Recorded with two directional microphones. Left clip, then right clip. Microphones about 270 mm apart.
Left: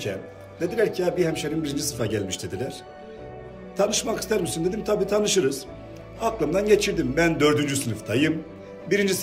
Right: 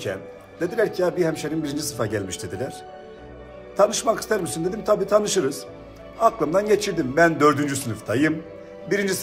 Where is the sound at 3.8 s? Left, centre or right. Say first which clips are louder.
Right 5 dB; right.